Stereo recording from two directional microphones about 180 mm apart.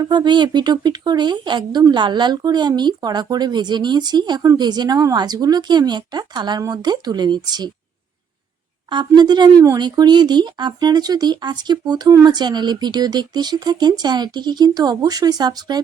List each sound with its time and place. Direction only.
0.0 s a woman's voice: 25° right (ahead or behind)
8.9 s a woman's voice: 25° right (ahead or behind)